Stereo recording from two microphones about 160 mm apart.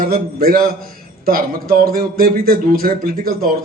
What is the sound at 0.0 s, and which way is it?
A man's voice, 65° right (ahead or behind).